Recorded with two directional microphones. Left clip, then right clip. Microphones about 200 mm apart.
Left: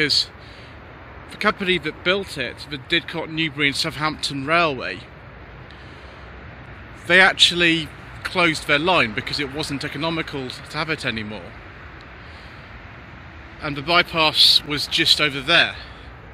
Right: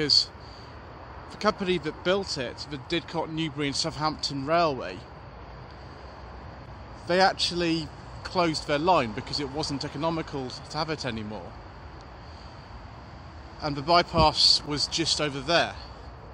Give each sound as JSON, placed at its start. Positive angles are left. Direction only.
{"t": 1.4, "sound": "speech", "side_deg": -5}
{"t": 7.1, "sound": "speech", "side_deg": 0}
{"t": 13.6, "sound": "speech", "side_deg": -15}